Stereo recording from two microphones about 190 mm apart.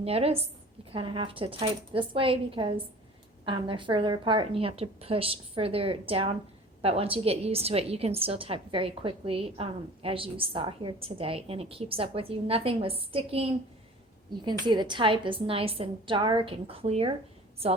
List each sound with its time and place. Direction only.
0.0 s a woman's voice: 30° right (ahead or behind)
14.7 s a woman's voice: 25° right (ahead or behind)